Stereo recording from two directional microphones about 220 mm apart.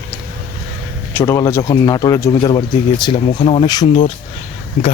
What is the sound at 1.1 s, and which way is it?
Speech, 15° left (ahead or behind).